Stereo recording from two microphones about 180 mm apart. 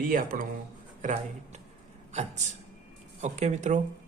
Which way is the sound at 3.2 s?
40° right (ahead or behind).